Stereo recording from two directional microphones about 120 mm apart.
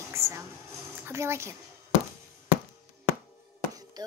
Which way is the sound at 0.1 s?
25° right (ahead or behind).